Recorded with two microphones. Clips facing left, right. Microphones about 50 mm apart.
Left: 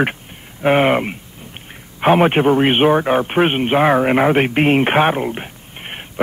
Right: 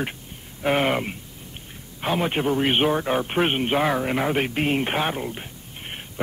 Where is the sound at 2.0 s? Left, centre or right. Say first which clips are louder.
Left 11 dB; left.